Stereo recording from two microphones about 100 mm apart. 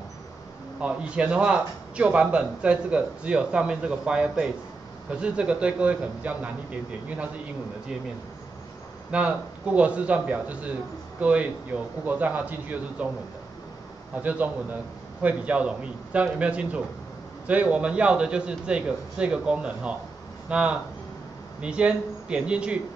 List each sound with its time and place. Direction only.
0.7 s a man's voice: 10° right (ahead or behind)
9.1 s a man's voice: 10° right (ahead or behind)
14.1 s a man's voice: 15° right (ahead or behind)